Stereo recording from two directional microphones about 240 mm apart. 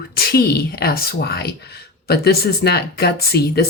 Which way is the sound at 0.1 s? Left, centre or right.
Left.